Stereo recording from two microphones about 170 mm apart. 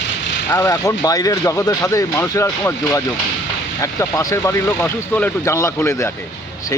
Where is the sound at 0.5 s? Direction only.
20° left (ahead or behind).